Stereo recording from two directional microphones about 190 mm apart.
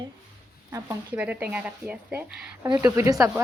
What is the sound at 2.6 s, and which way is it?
Speech, 15° right (ahead or behind).